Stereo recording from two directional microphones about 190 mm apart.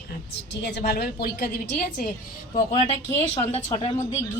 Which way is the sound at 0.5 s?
60° left (ahead or behind).